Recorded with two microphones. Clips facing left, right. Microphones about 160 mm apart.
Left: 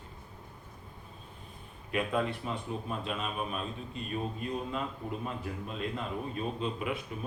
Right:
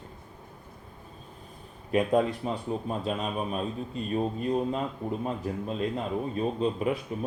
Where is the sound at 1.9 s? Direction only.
40° right (ahead or behind).